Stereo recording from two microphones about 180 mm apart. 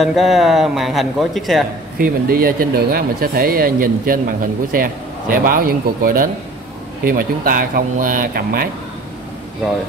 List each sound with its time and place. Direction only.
0.0 s a man's voice: centre (ahead or behind)
2.0 s speech: 55° right (ahead or behind)